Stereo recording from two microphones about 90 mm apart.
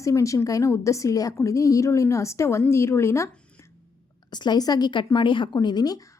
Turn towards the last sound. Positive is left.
turn(degrees=50)  # may be behind; listen again after turning